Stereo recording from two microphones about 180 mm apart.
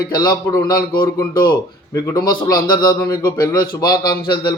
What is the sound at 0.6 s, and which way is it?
Speech, 55° left (ahead or behind).